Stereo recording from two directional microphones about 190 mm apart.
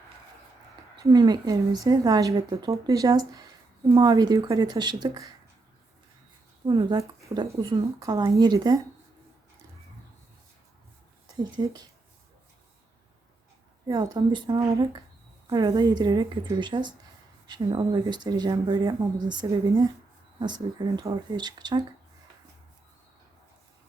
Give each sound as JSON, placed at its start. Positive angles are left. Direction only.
{"t": 0.9, "sound": "speech", "side_deg": -20}
{"t": 6.7, "sound": "speech", "side_deg": -25}
{"t": 11.3, "sound": "speech", "side_deg": -20}
{"t": 13.8, "sound": "speech", "side_deg": -20}